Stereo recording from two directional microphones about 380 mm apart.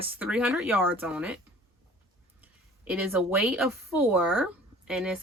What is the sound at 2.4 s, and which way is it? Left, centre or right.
Speech, centre.